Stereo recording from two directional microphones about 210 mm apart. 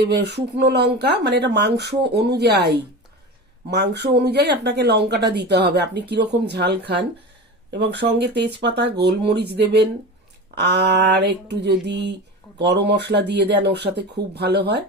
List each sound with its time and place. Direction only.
0.1 s speech: 55° right (ahead or behind)
3.7 s speech: 50° right (ahead or behind)